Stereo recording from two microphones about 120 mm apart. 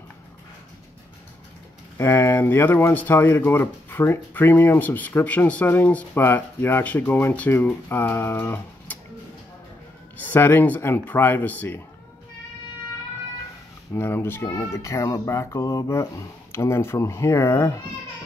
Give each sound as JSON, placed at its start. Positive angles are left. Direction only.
{"t": 2.0, "sound": "speech", "side_deg": 20}
{"t": 10.1, "sound": "speech", "side_deg": 15}
{"t": 13.9, "sound": "speech", "side_deg": 20}